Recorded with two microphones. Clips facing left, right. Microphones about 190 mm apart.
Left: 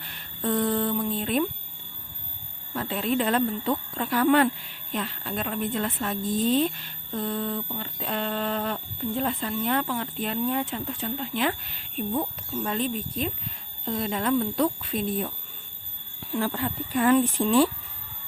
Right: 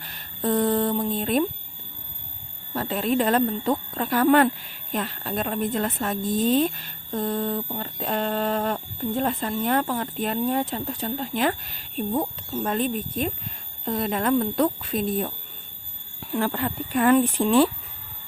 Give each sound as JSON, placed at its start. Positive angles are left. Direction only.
{"t": 0.0, "sound": "a sound", "side_deg": -40}
{"t": 2.7, "sound": "a woman's voice", "side_deg": -40}
{"t": 16.3, "sound": "speech", "side_deg": -60}